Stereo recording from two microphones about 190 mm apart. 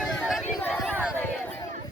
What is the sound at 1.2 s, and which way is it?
Chatter, 10° left (ahead or behind).